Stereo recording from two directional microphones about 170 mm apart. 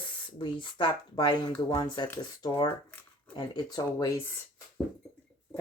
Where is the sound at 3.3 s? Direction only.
25° left (ahead or behind).